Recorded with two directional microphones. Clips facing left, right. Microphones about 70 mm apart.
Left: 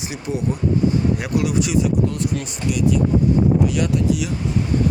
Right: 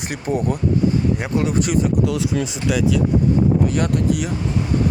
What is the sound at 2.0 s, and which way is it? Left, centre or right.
Speech, right.